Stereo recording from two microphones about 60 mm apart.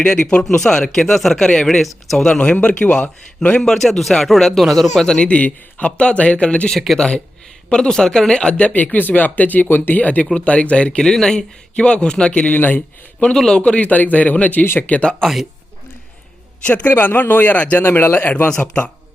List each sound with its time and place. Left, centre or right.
0.0 s a man's voice: centre
3.6 s a man's voice: centre
6.7 s a man's voice: centre
7.7 s a man's voice: centre
12.5 s a man's voice: left
13.1 s a man's voice: centre
13.6 s speech: left
16.6 s speech: left
17.8 s a man's voice: left
18.4 s a man's voice: centre